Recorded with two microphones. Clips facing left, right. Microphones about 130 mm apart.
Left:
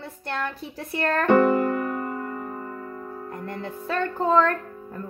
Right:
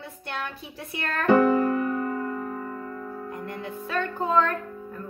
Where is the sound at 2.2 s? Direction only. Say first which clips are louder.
Right 2 dB; 30° left (ahead or behind).